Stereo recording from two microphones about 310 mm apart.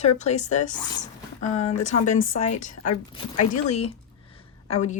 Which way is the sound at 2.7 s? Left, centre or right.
Left.